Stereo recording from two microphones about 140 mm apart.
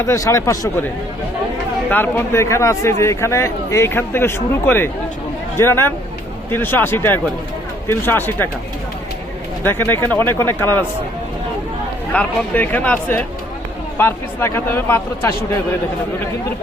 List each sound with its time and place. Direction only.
0.0 s speech: 20° left (ahead or behind)
1.9 s speech: 15° left (ahead or behind)
9.6 s speech: 15° left (ahead or behind)
12.1 s speech: 10° left (ahead or behind)